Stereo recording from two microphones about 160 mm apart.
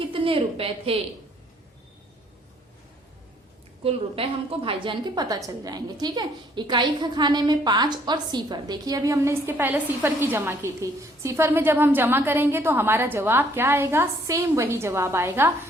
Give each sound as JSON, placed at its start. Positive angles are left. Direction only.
{"t": 0.1, "sound": "speech", "side_deg": -35}
{"t": 3.8, "sound": "a woman's voice", "side_deg": -35}